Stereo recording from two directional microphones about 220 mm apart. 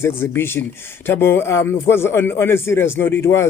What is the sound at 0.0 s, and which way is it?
Speech, 10° left (ahead or behind).